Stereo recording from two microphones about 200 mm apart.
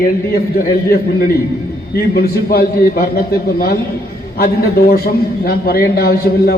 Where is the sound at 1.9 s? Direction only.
50° left (ahead or behind).